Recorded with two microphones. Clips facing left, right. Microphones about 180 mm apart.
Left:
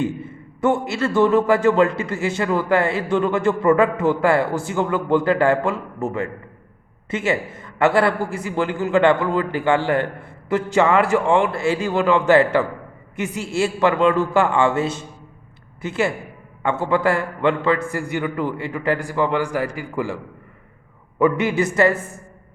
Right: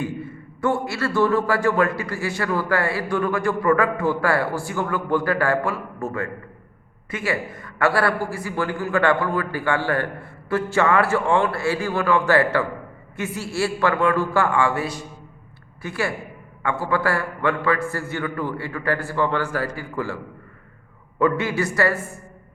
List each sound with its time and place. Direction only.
0.0 s a man's voice: 20° left (ahead or behind)
21.2 s a man's voice: 15° left (ahead or behind)